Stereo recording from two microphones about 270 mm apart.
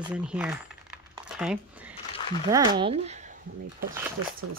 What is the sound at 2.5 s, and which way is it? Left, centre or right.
Speech, centre.